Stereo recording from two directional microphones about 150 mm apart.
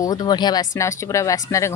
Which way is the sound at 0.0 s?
25° left (ahead or behind).